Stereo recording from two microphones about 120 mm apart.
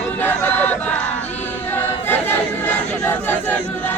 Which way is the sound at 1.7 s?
15° left (ahead or behind).